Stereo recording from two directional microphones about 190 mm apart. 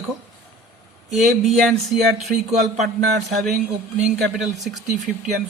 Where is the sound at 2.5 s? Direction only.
35° right (ahead or behind).